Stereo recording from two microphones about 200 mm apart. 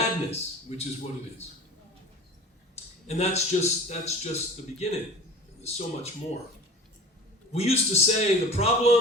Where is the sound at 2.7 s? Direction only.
35° left (ahead or behind).